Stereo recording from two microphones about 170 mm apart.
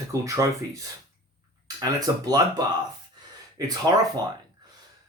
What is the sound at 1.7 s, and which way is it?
Speech, 20° right (ahead or behind).